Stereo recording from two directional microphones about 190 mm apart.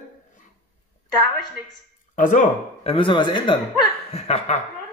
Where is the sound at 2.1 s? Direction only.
45° left (ahead or behind).